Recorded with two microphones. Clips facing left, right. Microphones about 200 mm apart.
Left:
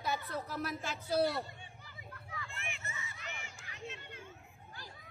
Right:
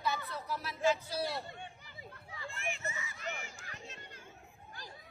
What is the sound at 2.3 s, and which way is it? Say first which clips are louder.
Hubbub: right 5 dB; 30° right (ahead or behind).